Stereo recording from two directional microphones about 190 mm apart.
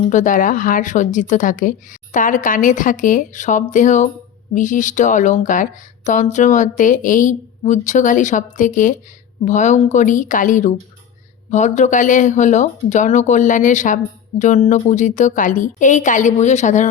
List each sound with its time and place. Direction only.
0.1 s speech: 40° left (ahead or behind)